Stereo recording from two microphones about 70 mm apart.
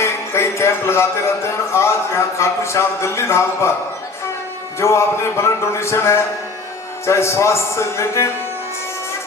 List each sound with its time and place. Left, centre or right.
0.0 s speech: left
4.8 s a man's voice: left